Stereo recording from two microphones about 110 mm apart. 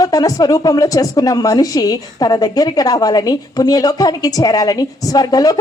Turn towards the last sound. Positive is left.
turn(degrees=35)  # may be behind; listen again after turning